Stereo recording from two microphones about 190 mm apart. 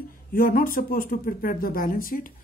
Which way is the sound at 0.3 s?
50° left (ahead or behind).